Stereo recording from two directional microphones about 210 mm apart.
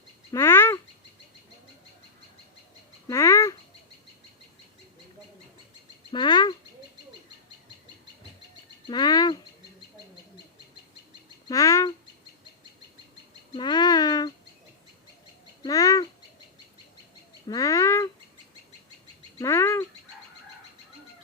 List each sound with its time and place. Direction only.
0.3 s bird: 15° left (ahead or behind)
3.1 s bird: 15° left (ahead or behind)
6.1 s bird: 20° left (ahead or behind)
8.9 s a sound: 20° left (ahead or behind)
11.4 s bird: 15° left (ahead or behind)
13.6 s a sound: 20° left (ahead or behind)
15.6 s bird: 15° left (ahead or behind)
17.5 s a sound: 15° left (ahead or behind)
19.4 s bird: 15° left (ahead or behind)